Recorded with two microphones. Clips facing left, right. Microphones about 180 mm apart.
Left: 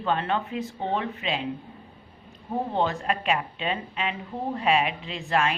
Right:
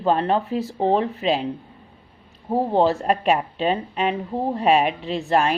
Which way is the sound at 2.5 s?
35° right (ahead or behind).